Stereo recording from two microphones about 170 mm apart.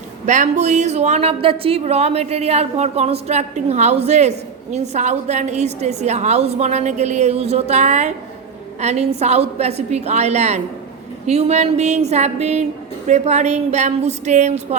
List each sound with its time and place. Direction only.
0.3 s a woman's voice: 45° right (ahead or behind)